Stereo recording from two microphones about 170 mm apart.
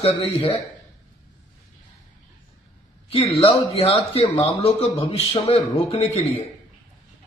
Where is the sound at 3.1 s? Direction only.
35° left (ahead or behind).